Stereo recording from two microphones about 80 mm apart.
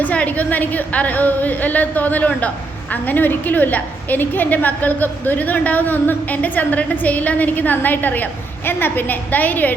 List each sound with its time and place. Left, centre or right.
0.0 s a woman's voice: centre